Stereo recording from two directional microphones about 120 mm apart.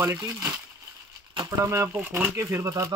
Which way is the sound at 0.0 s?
20° right (ahead or behind).